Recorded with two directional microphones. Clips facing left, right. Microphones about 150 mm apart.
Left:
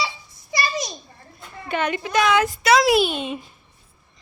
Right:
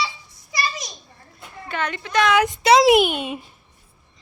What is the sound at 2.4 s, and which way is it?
Speech, 25° right (ahead or behind).